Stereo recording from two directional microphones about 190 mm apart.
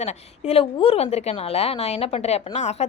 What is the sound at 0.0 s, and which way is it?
Speech, 35° left (ahead or behind).